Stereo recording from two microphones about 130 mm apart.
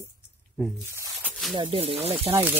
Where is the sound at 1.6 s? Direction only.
45° right (ahead or behind).